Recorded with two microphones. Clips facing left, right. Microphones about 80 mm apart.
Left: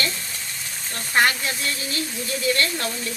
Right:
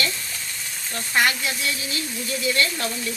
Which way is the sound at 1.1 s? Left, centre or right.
Left.